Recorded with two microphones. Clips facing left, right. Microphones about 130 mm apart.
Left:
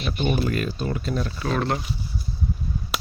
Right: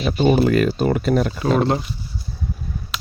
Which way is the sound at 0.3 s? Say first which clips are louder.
Right 9 dB; 85° right.